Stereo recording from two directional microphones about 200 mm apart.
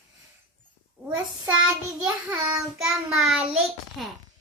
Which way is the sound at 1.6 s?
5° right (ahead or behind).